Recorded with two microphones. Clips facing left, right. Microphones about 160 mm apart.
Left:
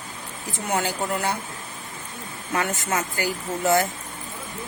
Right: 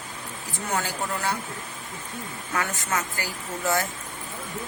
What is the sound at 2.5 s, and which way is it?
Speech, 25° left (ahead or behind).